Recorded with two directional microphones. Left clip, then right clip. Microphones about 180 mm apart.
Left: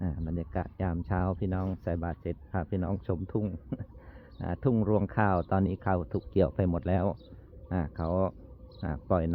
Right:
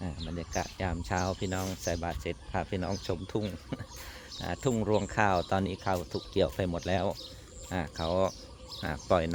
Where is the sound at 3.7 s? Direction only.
10° left (ahead or behind).